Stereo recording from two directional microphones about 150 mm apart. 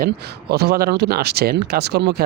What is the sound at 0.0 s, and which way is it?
Speech, 90° right.